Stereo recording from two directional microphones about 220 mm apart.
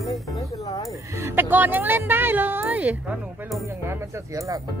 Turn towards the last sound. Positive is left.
turn(degrees=-15)  # may be behind; listen again after turning